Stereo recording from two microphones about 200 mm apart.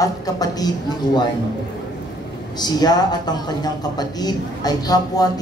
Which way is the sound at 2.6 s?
20° left (ahead or behind).